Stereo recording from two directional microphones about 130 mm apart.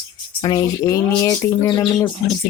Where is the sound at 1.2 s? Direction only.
25° left (ahead or behind).